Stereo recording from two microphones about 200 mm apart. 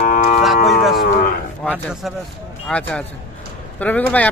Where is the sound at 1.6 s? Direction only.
Centre (ahead or behind).